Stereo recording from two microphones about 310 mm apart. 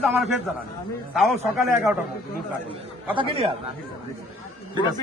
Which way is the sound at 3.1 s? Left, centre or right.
Centre.